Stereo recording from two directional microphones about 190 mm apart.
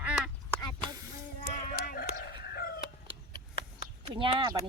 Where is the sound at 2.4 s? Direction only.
55° left (ahead or behind).